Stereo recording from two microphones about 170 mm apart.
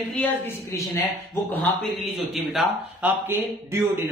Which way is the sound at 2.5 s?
10° right (ahead or behind).